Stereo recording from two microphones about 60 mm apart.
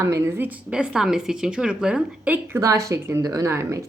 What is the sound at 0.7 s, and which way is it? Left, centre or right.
Speech, centre.